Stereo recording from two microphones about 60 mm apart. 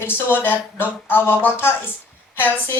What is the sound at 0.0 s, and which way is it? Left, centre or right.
Speech, left.